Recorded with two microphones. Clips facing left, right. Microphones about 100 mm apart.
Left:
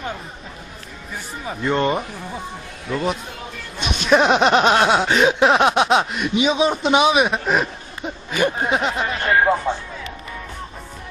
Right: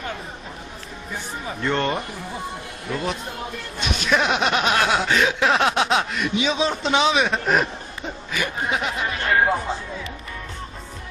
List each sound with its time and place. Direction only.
1.5 s speech: 10° left (ahead or behind)
2.8 s speech: centre (ahead or behind)
3.8 s speech: 20° left (ahead or behind); by 7.7 s centre (ahead or behind)
8.3 s speech: 30° left (ahead or behind)